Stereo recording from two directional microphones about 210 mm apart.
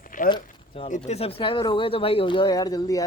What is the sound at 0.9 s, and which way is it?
Speech, 35° left (ahead or behind).